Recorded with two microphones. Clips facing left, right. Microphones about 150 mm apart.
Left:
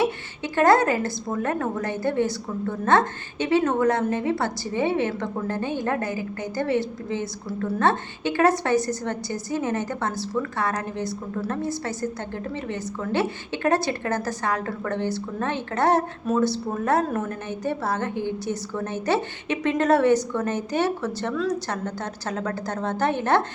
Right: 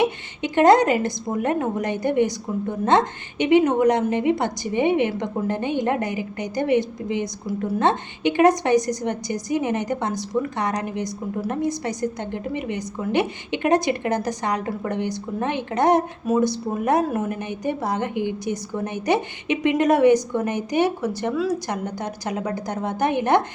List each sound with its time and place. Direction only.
0.0 s a woman's voice: 20° right (ahead or behind)